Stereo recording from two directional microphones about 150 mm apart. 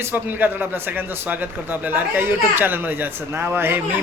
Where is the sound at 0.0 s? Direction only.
15° right (ahead or behind).